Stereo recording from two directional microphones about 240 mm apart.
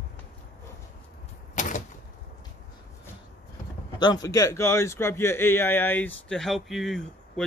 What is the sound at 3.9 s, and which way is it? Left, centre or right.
A man's voice, centre.